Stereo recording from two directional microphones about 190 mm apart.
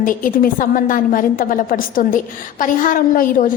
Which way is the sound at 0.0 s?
45° left (ahead or behind).